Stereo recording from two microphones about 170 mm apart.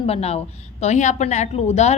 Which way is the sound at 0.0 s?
35° left (ahead or behind).